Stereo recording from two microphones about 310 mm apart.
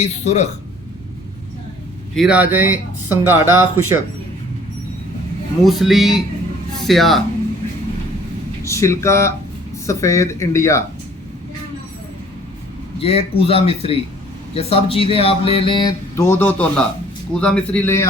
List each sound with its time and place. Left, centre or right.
0.0 s speech: left
2.1 s speech: centre
5.6 s speech: centre
8.6 s speech: centre
13.0 s speech: centre